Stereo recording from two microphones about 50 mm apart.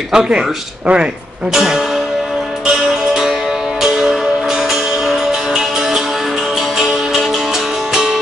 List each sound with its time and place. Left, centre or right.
0.1 s speech: centre
1.5 s speech: centre
3.8 s music: centre
7.9 s music: centre